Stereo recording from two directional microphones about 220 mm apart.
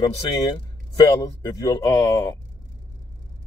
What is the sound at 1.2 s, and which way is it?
Speech, 15° left (ahead or behind).